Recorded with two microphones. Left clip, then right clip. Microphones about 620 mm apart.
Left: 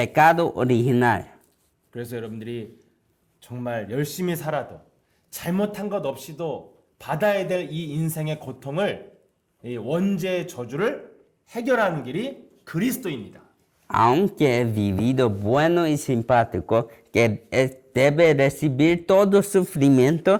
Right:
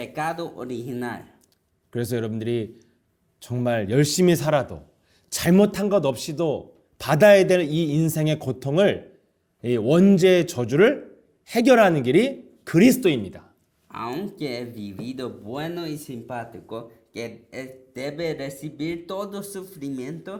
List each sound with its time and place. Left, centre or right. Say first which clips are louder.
0.0 s speech: left 11 dB; left
1.9 s a man's voice: right 5 dB; right
13.9 s speech: left 13 dB; left